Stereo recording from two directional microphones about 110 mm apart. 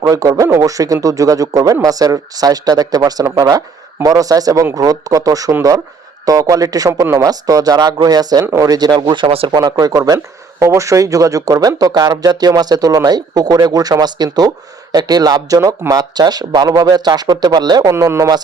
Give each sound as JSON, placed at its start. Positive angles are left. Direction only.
{"t": 0.0, "sound": "speech", "side_deg": -35}
{"t": 9.5, "sound": "speech", "side_deg": -35}
{"t": 17.9, "sound": "speech", "side_deg": -25}